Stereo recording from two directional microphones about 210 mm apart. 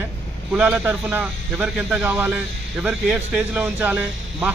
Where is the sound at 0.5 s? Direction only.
5° right (ahead or behind).